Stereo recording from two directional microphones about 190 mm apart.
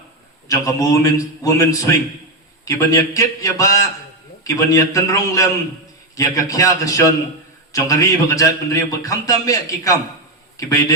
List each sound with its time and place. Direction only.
0.4 s a man's voice: 15° left (ahead or behind)